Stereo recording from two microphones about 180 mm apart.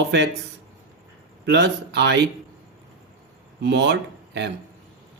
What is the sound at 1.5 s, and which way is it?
Speech, 75° right (ahead or behind).